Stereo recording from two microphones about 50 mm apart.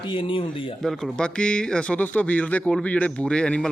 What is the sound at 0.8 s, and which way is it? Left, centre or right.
Speech, centre.